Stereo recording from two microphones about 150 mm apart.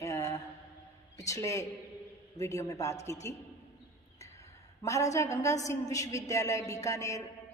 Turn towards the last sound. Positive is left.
turn(degrees=20)  # may be behind; listen again after turning